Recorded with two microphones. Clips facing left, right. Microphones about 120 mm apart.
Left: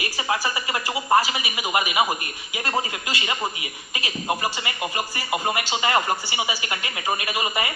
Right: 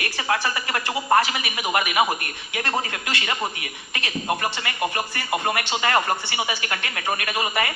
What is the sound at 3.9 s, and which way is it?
Speech, 10° left (ahead or behind).